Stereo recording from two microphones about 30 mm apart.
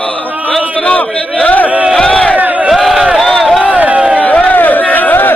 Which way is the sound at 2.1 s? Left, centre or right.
Left.